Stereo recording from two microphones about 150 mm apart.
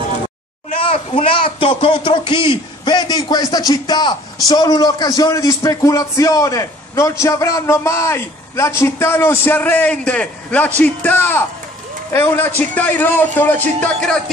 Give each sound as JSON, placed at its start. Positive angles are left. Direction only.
{"t": 0.7, "sound": "a man's voice", "side_deg": 40}